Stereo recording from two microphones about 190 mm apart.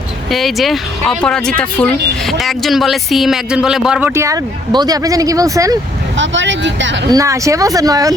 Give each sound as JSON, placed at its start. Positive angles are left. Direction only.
{"t": 0.3, "sound": "speech", "side_deg": 0}
{"t": 4.1, "sound": "speech", "side_deg": -15}
{"t": 6.1, "sound": "speech", "side_deg": -75}
{"t": 7.1, "sound": "speech", "side_deg": -15}